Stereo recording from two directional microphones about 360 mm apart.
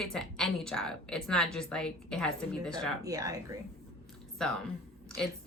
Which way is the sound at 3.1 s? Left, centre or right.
Centre.